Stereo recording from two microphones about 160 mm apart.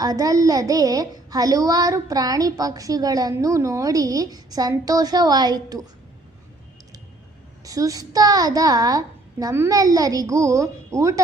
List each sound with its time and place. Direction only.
0.0 s a woman's voice: 20° right (ahead or behind)
7.6 s a woman's voice: 20° right (ahead or behind)